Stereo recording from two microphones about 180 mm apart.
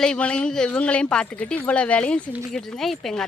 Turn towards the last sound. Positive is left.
turn(degrees=0)  # may be behind; listen again after turning